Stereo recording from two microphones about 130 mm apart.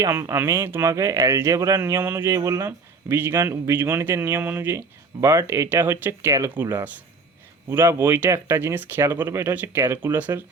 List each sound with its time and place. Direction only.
0.0 s speech: 20° right (ahead or behind)